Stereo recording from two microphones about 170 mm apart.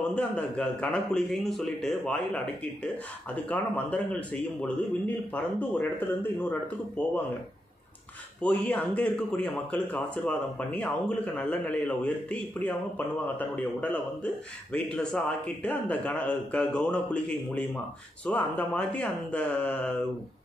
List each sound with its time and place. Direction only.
0.1 s a man's voice: 5° left (ahead or behind)
8.4 s speech: 10° left (ahead or behind)